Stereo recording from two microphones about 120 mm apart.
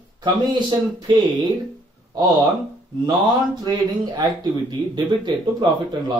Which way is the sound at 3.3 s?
35° right (ahead or behind).